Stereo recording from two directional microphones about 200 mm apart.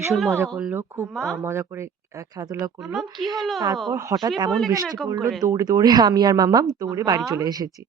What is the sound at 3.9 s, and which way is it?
Speech, 15° right (ahead or behind).